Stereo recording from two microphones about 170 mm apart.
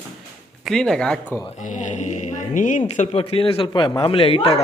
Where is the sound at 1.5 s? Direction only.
45° left (ahead or behind).